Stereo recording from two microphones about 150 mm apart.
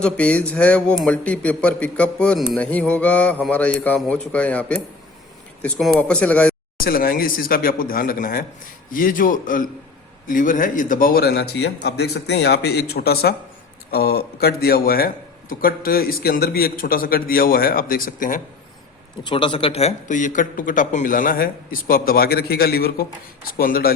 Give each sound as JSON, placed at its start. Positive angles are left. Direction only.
{"t": 0.0, "sound": "speech", "side_deg": 10}
{"t": 6.8, "sound": "a man's voice", "side_deg": 75}
{"t": 19.2, "sound": "a man's voice", "side_deg": 35}
{"t": 23.6, "sound": "speech", "side_deg": 80}